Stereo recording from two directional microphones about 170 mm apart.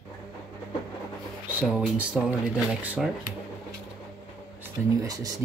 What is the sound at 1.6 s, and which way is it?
Speech, 5° right (ahead or behind).